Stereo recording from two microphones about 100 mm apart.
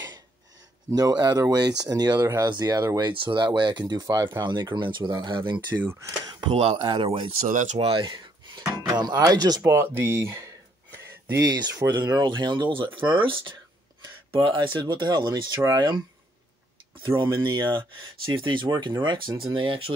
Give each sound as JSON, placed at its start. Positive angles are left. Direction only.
{"t": 0.9, "sound": "speech", "side_deg": -40}
{"t": 3.1, "sound": "speech", "side_deg": -55}
{"t": 5.7, "sound": "speech", "side_deg": -15}
{"t": 6.5, "sound": "speech", "side_deg": -90}
{"t": 6.8, "sound": "speech", "side_deg": -55}
{"t": 9.6, "sound": "a sound", "side_deg": -25}
{"t": 11.3, "sound": "speech", "side_deg": -40}
{"t": 17.2, "sound": "speech", "side_deg": -50}